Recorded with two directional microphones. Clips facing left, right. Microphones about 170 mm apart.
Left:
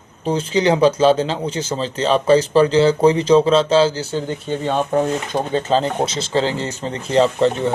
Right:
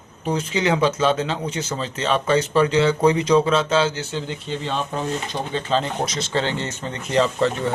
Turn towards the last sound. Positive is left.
turn(degrees=30)  # may be behind; listen again after turning